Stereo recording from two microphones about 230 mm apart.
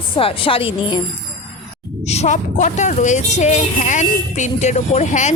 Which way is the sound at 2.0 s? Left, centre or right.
Left.